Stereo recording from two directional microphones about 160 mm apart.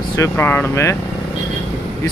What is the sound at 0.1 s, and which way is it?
Speech, 15° left (ahead or behind).